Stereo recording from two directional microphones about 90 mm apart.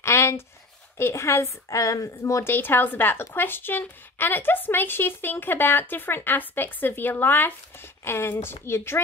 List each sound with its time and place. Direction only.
0.0 s a sound: 30° left (ahead or behind)
0.9 s a woman's voice: 30° left (ahead or behind)
2.5 s speech: 20° left (ahead or behind)